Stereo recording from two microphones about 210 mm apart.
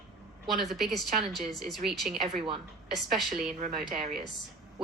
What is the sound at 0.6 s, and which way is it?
Speech, centre (ahead or behind).